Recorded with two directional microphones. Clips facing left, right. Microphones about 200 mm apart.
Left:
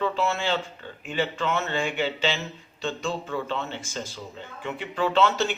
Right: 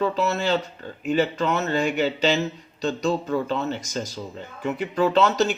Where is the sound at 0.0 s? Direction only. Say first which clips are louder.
Right 3 dB; 40° right (ahead or behind).